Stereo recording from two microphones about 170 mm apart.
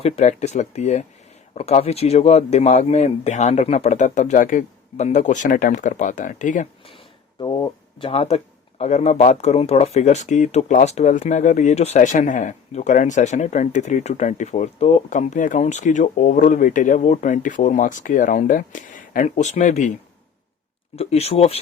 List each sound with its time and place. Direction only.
0.0 s speech: 40° left (ahead or behind)
6.8 s a sound: 30° left (ahead or behind)
8.8 s speech: 40° left (ahead or behind)
20.9 s speech: 35° left (ahead or behind)